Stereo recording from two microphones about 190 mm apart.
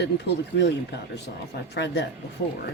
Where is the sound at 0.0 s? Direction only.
65° left (ahead or behind).